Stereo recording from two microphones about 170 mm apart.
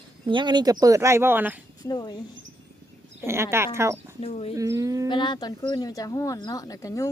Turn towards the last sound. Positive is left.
turn(degrees=20)  # may be behind; listen again after turning